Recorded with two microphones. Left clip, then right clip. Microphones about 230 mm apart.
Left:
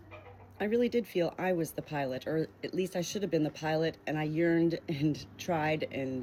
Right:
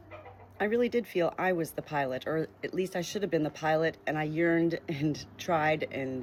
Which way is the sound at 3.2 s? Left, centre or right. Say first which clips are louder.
Right 3 dB; right.